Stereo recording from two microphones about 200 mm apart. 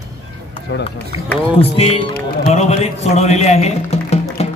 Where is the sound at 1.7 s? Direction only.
30° left (ahead or behind).